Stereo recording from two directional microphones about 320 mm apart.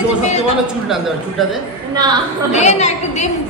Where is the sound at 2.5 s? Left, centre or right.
Left.